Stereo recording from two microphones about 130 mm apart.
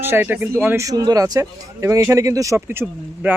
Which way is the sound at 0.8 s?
30° right (ahead or behind).